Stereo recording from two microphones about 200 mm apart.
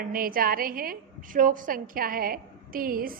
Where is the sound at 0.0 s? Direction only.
45° right (ahead or behind).